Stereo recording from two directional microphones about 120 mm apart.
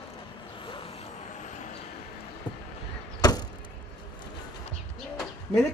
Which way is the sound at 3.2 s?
35° left (ahead or behind).